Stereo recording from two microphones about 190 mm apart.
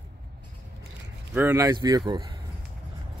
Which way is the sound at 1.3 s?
10° right (ahead or behind).